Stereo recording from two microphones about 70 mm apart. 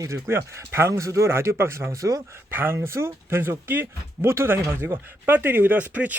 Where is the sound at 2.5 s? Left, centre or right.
Right.